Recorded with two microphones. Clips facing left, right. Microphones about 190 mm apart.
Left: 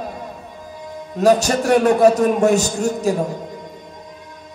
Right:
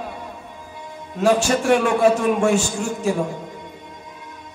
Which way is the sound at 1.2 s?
40° left (ahead or behind).